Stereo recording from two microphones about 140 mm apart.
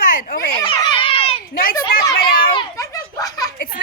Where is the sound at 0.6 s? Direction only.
35° left (ahead or behind).